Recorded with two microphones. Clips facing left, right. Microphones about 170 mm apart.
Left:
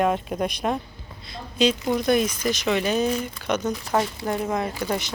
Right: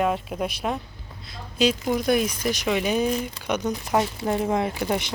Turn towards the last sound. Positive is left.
turn(degrees=-20)  # may be behind; listen again after turning